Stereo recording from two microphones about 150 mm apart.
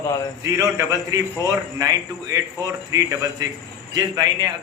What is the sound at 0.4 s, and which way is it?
A man's voice, 20° right (ahead or behind).